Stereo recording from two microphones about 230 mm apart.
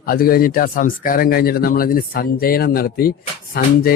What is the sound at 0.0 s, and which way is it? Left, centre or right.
Speech, left.